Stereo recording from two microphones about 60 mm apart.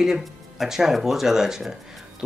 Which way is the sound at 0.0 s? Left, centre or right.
Centre.